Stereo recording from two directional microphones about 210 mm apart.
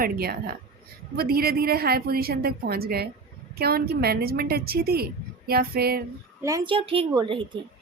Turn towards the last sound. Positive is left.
turn(degrees=-25)  # may be behind; listen again after turning